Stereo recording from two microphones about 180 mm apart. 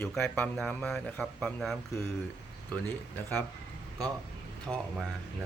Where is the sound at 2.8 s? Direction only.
10° left (ahead or behind).